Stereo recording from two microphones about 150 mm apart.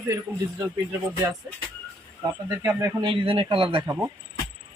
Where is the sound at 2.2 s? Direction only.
20° right (ahead or behind).